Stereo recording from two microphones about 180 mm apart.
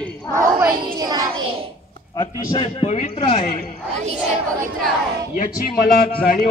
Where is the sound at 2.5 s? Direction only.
30° left (ahead or behind).